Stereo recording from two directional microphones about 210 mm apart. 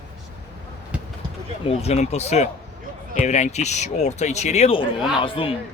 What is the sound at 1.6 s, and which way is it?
A man's voice, 30° left (ahead or behind).